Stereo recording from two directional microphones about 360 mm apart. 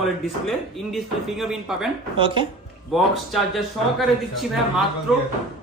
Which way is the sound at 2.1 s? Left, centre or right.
Centre.